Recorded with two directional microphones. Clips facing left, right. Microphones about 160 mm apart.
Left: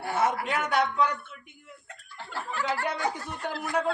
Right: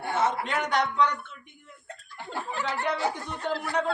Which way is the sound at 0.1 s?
10° left (ahead or behind).